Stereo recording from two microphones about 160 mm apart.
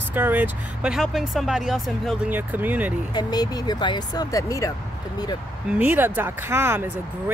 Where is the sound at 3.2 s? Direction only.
25° left (ahead or behind).